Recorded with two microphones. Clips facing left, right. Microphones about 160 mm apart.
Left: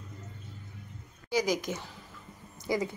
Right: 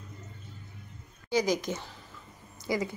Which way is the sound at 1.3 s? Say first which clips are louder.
Right 1 dB; 10° left (ahead or behind).